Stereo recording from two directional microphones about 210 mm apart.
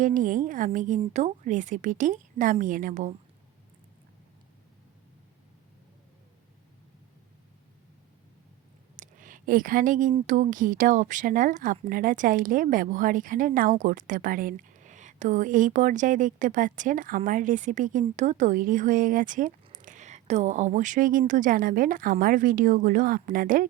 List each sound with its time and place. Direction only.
0.0 s speech: 40° right (ahead or behind)
9.0 s a sound: 40° right (ahead or behind)
10.2 s speech: 40° right (ahead or behind)